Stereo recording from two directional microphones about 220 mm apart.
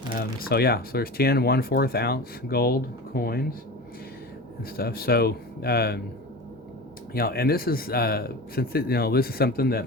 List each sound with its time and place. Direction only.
0.1 s speech: 45° left (ahead or behind)
4.8 s speech: 45° left (ahead or behind)
7.1 s speech: 45° left (ahead or behind)